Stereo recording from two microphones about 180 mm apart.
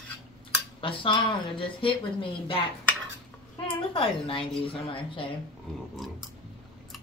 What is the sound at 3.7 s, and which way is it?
Speech, 30° left (ahead or behind).